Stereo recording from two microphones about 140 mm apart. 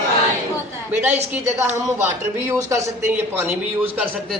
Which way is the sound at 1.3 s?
15° right (ahead or behind).